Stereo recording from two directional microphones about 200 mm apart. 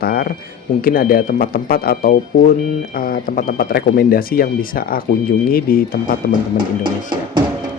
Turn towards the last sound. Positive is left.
turn(degrees=-25)  # may be behind; listen again after turning